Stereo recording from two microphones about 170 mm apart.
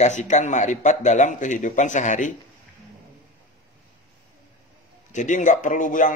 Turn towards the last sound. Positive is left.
turn(degrees=50)  # may be behind; listen again after turning